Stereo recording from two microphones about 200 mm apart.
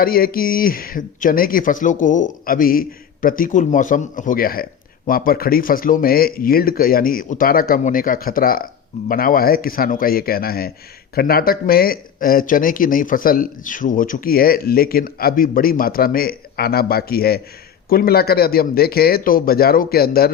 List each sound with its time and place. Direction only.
0.0 s speech: 45° left (ahead or behind)